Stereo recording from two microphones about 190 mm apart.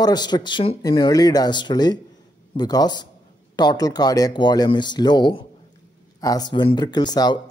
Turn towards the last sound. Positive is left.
turn(degrees=20)  # may be behind; listen again after turning